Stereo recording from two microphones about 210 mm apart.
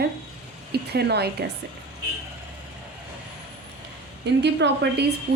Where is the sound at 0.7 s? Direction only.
50° right (ahead or behind).